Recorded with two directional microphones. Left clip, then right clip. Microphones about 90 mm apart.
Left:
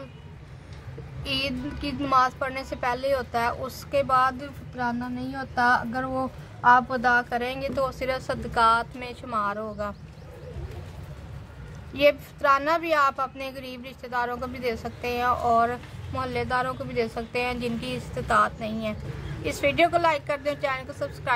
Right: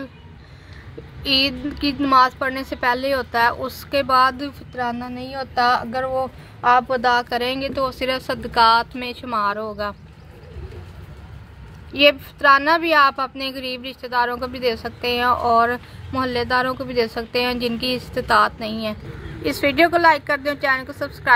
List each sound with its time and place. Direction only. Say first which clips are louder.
1.2 s a woman's voice: right 9 dB; 20° right (ahead or behind)
6.6 s a woman's voice: right 3 dB; 55° right (ahead or behind)
7.5 s a woman's voice: right 4 dB; 20° right (ahead or behind)
11.9 s a woman's voice: right 6 dB; 15° right (ahead or behind)